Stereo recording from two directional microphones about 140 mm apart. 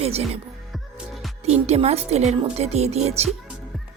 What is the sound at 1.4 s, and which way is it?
A woman's voice, 50° right (ahead or behind).